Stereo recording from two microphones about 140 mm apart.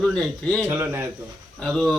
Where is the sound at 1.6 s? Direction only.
5° left (ahead or behind).